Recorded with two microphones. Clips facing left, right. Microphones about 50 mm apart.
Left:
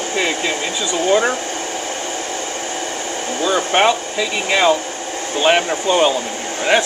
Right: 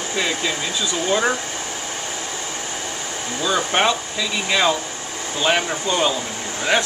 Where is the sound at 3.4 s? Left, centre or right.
Centre.